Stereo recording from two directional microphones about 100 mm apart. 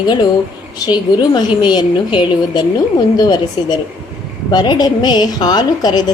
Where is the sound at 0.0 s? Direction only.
45° left (ahead or behind).